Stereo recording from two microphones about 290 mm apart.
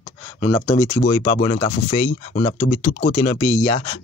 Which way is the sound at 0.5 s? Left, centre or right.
Centre.